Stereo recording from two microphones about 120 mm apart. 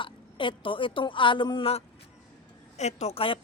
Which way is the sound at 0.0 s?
45° left (ahead or behind).